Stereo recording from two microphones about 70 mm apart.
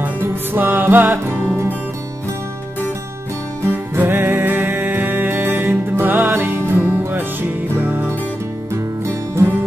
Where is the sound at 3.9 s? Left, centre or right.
Right.